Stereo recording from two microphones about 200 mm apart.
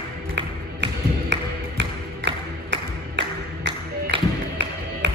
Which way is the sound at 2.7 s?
65° right (ahead or behind).